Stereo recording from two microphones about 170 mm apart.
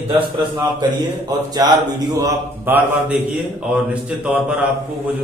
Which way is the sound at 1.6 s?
20° right (ahead or behind).